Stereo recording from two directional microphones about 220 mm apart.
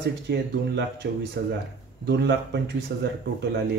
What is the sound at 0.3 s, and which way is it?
Speech, 50° right (ahead or behind).